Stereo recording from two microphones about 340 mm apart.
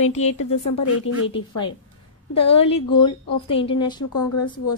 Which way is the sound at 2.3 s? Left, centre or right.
Centre.